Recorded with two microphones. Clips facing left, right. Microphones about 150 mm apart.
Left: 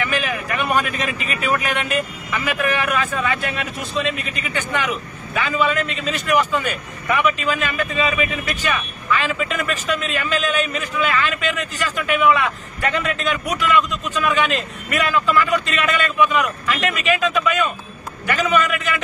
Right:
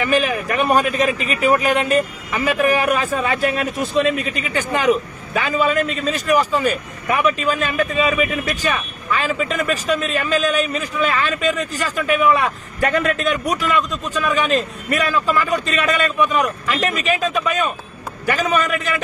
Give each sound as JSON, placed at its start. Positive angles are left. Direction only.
{"t": 0.0, "sound": "speech", "side_deg": -40}